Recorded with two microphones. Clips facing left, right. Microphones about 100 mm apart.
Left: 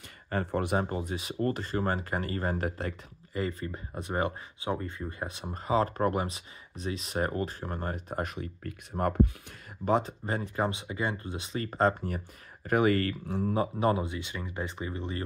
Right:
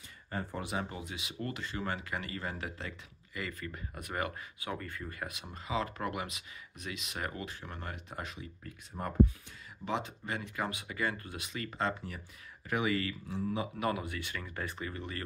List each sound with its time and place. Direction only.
0.3 s speech: 65° left (ahead or behind); by 2.9 s 45° left (ahead or behind)
3.3 s speech: 30° left (ahead or behind)
5.4 s speech: 40° left (ahead or behind); by 9.3 s 60° left (ahead or behind)
9.8 s speech: 40° left (ahead or behind)
13.7 s speech: 30° left (ahead or behind)